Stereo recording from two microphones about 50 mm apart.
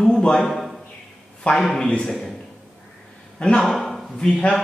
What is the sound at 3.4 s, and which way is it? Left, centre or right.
Speech, centre.